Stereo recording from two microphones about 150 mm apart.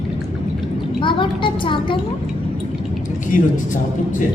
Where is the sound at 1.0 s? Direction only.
35° left (ahead or behind).